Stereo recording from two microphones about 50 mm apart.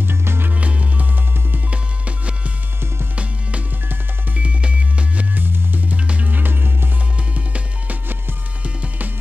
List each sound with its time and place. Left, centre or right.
0.0 s music: right
0.6 s music: right
3.9 s music: right
5.3 s music: right
5.9 s music: right
7.3 s music: right